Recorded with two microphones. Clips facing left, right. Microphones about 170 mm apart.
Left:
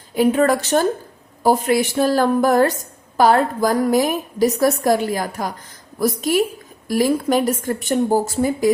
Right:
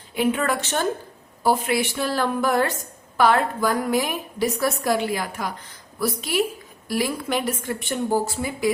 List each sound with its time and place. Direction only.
0.1 s a woman's voice: 40° left (ahead or behind)